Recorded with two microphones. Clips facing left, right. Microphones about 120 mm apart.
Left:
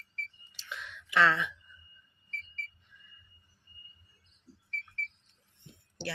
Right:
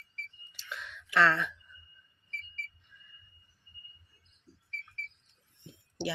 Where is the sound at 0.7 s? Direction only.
Centre (ahead or behind).